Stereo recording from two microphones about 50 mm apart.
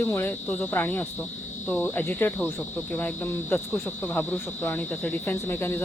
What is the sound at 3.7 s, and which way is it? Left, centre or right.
Speech, left.